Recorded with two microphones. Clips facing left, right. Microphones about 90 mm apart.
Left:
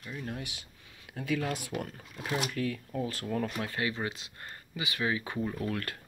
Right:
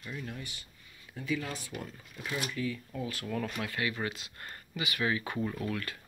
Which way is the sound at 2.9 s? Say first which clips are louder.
Left 3 dB; 35° left (ahead or behind).